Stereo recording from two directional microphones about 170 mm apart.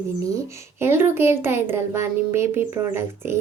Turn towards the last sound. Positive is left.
turn(degrees=-15)  # may be behind; listen again after turning